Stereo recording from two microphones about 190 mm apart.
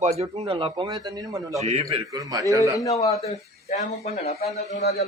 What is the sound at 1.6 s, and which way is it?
Speech, 35° right (ahead or behind).